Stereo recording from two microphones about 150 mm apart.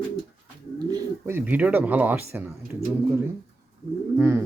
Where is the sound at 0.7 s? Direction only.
25° right (ahead or behind).